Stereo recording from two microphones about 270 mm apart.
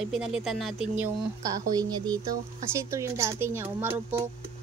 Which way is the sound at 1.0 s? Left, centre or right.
Centre.